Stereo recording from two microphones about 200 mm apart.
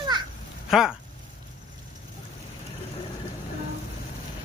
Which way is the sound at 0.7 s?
Centre (ahead or behind).